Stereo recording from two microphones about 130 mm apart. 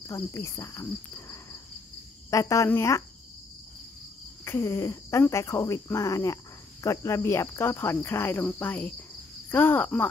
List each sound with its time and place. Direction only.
0.0 s cricket: 25° left (ahead or behind)
2.3 s speech: 25° left (ahead or behind)
4.5 s speech: 20° left (ahead or behind)